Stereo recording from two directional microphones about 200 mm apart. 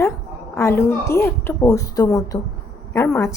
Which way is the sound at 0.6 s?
15° left (ahead or behind).